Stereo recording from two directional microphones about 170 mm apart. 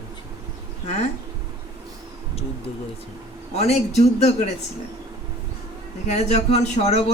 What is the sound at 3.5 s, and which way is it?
Speech, 40° left (ahead or behind).